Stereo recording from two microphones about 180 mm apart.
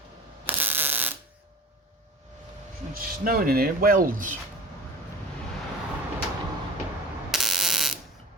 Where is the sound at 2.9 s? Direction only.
50° right (ahead or behind).